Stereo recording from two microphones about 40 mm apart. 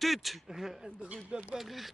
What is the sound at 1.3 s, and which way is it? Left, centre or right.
Speech, right.